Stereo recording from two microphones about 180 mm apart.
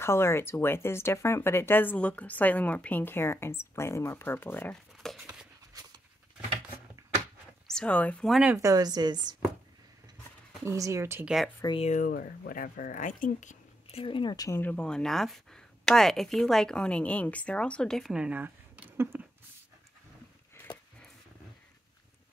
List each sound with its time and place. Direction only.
0.0 s speech: 15° left (ahead or behind)
5.0 s a sound: centre (ahead or behind)
5.7 s dog: 20° right (ahead or behind)
7.6 s speech: 5° left (ahead or behind)
8.5 s a woman's voice: 20° right (ahead or behind)
10.6 s speech: 15° right (ahead or behind)
11.6 s speech: 30° left (ahead or behind)
11.9 s speech: 50° left (ahead or behind)
14.0 s speech: 25° left (ahead or behind); by 19.2 s 10° right (ahead or behind)